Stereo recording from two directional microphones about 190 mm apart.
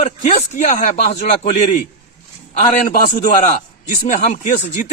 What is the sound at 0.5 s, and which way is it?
A man's voice, 35° left (ahead or behind).